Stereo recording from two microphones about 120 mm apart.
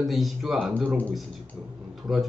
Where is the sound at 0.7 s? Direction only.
15° right (ahead or behind).